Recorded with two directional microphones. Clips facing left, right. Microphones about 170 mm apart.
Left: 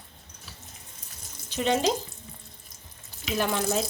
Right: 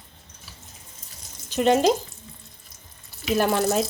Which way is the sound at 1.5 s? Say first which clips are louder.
Right 6 dB; 50° right (ahead or behind).